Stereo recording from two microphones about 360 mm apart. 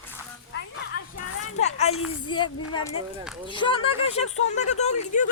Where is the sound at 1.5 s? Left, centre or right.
Centre.